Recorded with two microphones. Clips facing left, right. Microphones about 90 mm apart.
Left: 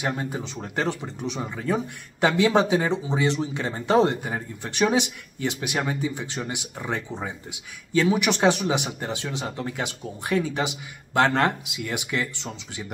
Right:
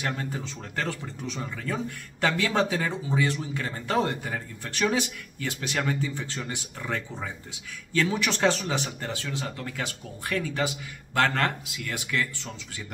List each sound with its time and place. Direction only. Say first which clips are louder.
0.0 s speech: left 3 dB; 20° left (ahead or behind)